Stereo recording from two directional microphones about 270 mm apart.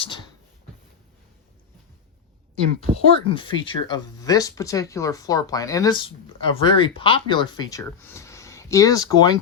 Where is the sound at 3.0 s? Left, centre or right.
Centre.